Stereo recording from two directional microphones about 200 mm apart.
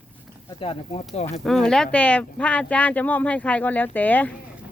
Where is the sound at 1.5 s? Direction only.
Centre (ahead or behind).